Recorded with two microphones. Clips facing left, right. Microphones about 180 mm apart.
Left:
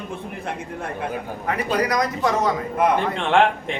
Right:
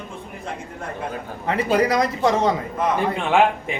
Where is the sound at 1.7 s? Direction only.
25° right (ahead or behind).